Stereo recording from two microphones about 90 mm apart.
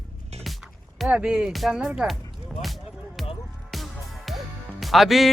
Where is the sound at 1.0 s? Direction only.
10° right (ahead or behind).